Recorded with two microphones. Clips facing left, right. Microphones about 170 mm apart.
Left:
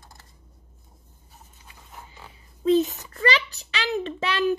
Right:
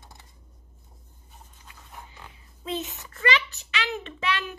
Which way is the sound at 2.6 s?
35° left (ahead or behind).